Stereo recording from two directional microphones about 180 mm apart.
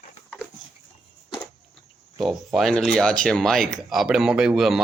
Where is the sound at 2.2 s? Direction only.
Centre (ahead or behind).